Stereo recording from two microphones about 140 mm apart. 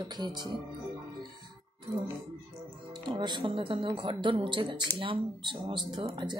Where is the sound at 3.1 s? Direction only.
35° right (ahead or behind).